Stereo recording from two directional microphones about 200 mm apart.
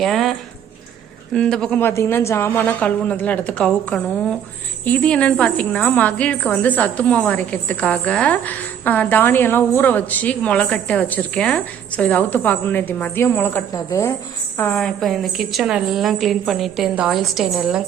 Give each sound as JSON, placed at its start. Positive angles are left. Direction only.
{"t": 0.0, "sound": "a woman's voice", "side_deg": 0}